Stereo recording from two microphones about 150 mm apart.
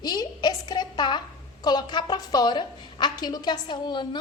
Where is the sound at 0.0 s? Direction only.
30° left (ahead or behind).